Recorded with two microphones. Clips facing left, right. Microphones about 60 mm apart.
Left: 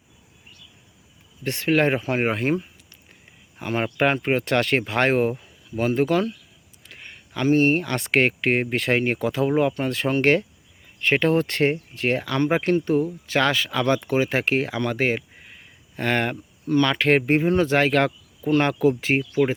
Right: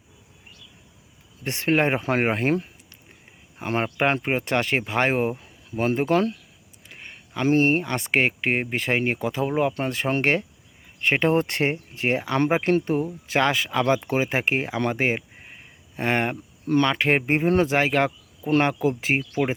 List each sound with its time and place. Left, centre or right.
1.5 s speech: right
2.0 s speech: right
2.2 s speech: right
3.6 s speech: right
5.7 s speech: right
12.8 s speech: right; by 19.2 s centre